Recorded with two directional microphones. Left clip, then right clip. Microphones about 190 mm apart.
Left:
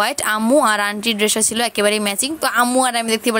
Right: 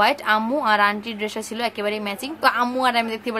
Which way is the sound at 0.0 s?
35° left (ahead or behind).